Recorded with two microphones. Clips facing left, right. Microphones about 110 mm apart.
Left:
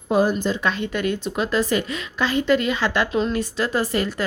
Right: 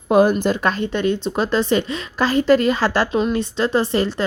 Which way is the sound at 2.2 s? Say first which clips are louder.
Right 4 dB; 40° right (ahead or behind).